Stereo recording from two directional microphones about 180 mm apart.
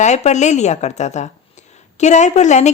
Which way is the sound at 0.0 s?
40° left (ahead or behind).